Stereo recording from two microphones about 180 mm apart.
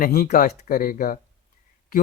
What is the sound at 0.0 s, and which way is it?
Speech, 55° left (ahead or behind).